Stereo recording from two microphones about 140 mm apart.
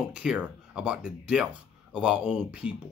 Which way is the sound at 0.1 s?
10° right (ahead or behind).